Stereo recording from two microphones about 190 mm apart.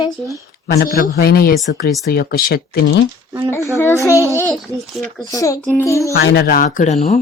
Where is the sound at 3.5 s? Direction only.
15° left (ahead or behind).